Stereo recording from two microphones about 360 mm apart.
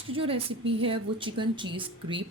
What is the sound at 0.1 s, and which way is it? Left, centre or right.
Speech, centre.